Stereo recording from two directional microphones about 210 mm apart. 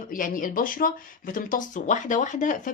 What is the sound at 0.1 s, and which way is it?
Speech, 40° left (ahead or behind).